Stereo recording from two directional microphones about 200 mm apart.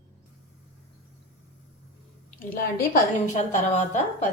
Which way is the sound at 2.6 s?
40° left (ahead or behind).